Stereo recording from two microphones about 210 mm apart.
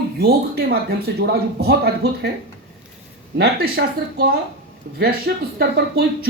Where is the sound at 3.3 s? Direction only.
50° right (ahead or behind).